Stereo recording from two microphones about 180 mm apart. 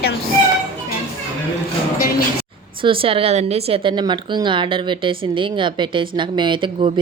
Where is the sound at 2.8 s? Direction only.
30° right (ahead or behind).